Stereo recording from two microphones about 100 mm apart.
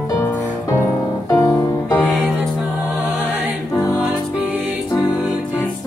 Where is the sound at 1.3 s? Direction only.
30° left (ahead or behind).